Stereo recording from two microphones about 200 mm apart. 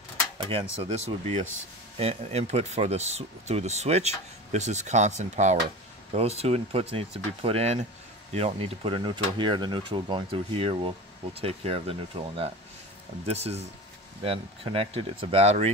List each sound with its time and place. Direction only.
0.4 s speech: 25° right (ahead or behind)